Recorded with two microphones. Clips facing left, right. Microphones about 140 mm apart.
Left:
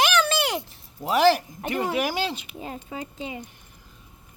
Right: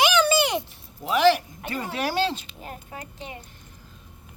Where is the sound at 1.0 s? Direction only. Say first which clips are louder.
Even; 40° left (ahead or behind).